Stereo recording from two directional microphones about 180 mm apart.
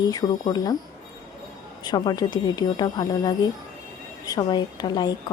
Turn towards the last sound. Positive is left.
turn(degrees=25)  # may be behind; listen again after turning